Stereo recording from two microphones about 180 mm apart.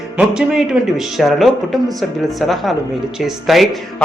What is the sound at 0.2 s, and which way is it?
Speech, 5° right (ahead or behind).